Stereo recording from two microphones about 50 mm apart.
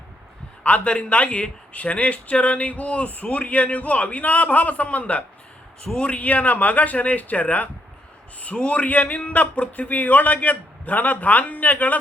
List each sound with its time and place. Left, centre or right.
0.6 s a man's voice: left